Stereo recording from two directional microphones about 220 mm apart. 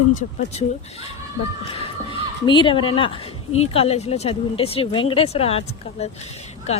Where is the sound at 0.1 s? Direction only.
35° left (ahead or behind).